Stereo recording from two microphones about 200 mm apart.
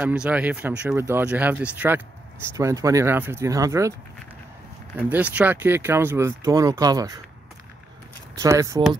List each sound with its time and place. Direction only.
0.0 s speech: 5° right (ahead or behind)
5.1 s speech: 5° right (ahead or behind)
8.4 s speech: 15° right (ahead or behind)